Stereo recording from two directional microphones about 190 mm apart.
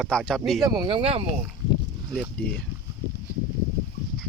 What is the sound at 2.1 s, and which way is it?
Speech, centre (ahead or behind).